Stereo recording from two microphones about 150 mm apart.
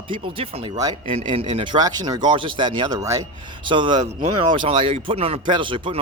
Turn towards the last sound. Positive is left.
turn(degrees=-35)  # may be behind; listen again after turning